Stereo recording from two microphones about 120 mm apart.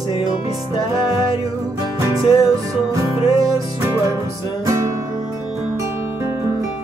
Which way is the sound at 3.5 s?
20° right (ahead or behind).